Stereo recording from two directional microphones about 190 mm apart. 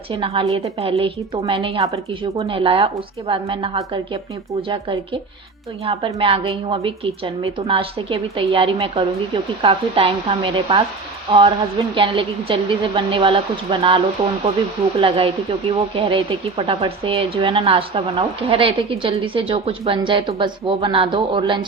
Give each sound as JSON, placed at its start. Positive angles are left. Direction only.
{"t": 0.1, "sound": "speech", "side_deg": -30}